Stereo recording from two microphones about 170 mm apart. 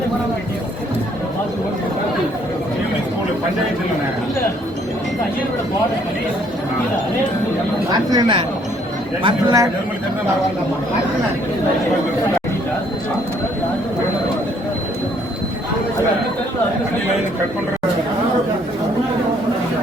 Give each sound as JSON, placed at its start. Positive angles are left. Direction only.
{"t": 8.1, "sound": "speech", "side_deg": -30}